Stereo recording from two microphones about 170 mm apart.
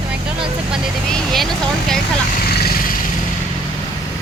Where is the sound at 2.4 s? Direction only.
65° left (ahead or behind).